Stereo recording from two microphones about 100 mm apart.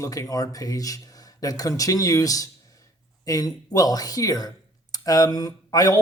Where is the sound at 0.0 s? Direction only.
35° left (ahead or behind).